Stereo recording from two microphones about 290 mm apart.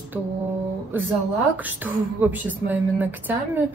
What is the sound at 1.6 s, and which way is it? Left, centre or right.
Speech, centre.